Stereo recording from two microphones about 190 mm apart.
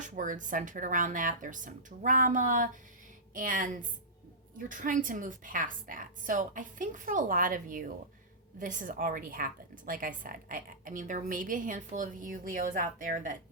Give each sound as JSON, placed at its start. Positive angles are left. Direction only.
{"t": 0.0, "sound": "a woman's voice", "side_deg": -40}